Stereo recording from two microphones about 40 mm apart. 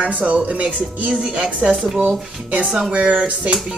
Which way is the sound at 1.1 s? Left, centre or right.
Right.